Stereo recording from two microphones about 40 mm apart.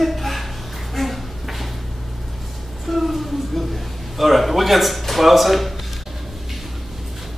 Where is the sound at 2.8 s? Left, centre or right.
Centre.